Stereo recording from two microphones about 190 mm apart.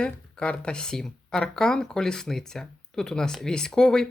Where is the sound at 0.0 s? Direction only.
5° left (ahead or behind).